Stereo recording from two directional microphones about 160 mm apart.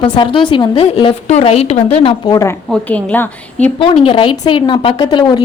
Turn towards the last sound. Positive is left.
turn(degrees=30)  # may be behind; listen again after turning